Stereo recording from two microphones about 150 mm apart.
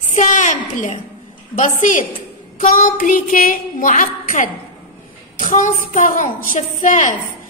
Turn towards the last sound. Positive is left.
turn(degrees=55)  # may be behind; listen again after turning